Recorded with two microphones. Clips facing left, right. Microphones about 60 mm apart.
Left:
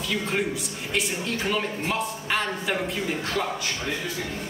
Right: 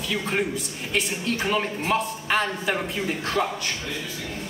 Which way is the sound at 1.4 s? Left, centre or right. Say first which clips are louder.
Right 3 dB; centre.